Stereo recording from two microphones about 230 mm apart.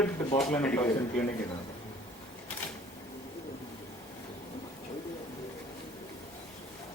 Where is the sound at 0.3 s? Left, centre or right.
Centre.